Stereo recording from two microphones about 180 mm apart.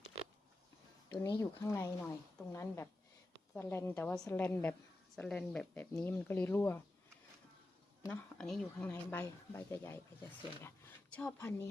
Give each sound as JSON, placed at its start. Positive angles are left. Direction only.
{"t": 1.1, "sound": "a woman's voice", "side_deg": 20}
{"t": 8.0, "sound": "a woman's voice", "side_deg": 5}